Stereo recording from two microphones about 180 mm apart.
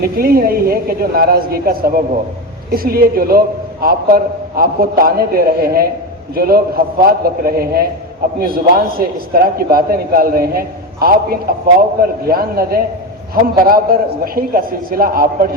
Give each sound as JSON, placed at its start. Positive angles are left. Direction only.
{"t": 0.0, "sound": "a man's voice", "side_deg": -55}